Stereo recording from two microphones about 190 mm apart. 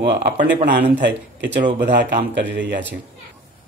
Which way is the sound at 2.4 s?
70° right (ahead or behind).